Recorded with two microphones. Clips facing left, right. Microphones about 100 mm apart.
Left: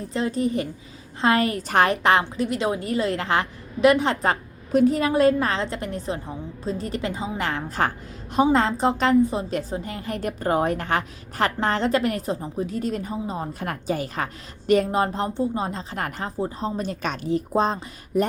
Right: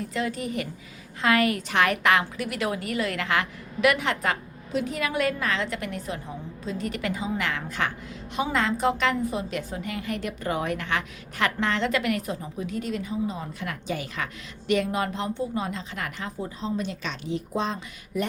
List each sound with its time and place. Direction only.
0.1 s a woman's voice: 30° left (ahead or behind)